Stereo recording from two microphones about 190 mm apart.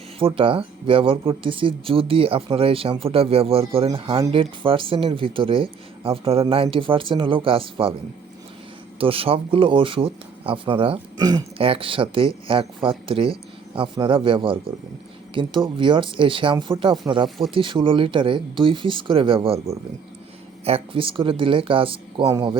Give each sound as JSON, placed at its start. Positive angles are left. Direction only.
{"t": 0.2, "sound": "speech", "side_deg": -30}
{"t": 9.0, "sound": "speech", "side_deg": -30}
{"t": 17.2, "sound": "speech", "side_deg": 0}
{"t": 17.5, "sound": "speech", "side_deg": -25}
{"t": 20.7, "sound": "speech", "side_deg": -30}